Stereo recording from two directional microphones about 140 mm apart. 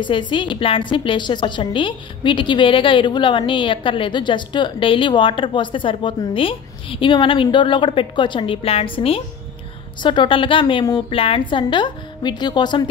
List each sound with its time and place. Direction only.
0.0 s a woman's voice: 35° left (ahead or behind)